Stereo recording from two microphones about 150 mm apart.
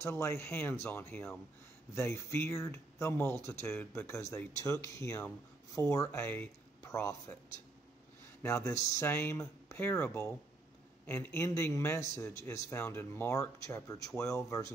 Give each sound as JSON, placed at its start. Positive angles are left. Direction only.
{"t": 0.0, "sound": "speech", "side_deg": 20}
{"t": 8.4, "sound": "speech", "side_deg": 20}